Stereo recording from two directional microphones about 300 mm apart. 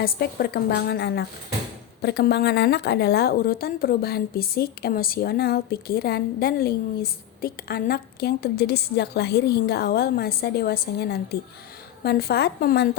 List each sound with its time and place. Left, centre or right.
0.0 s a woman's voice: left